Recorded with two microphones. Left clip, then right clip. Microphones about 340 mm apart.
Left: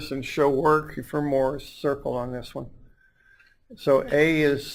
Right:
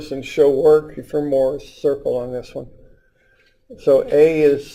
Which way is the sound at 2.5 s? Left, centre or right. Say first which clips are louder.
Right 5 dB; left.